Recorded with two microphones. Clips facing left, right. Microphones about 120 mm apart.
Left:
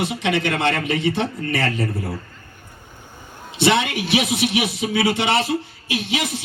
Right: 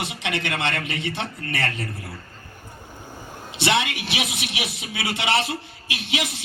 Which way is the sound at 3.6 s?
40° left (ahead or behind).